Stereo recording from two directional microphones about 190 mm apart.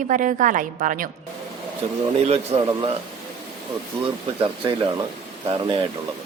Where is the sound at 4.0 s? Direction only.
30° right (ahead or behind).